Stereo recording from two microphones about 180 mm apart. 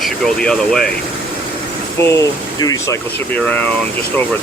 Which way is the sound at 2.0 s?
15° left (ahead or behind).